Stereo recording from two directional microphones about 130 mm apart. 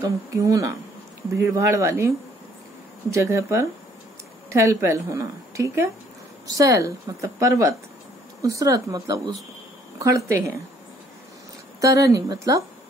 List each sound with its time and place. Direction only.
0.0 s a woman's voice: 25° right (ahead or behind)
11.8 s a woman's voice: 25° right (ahead or behind)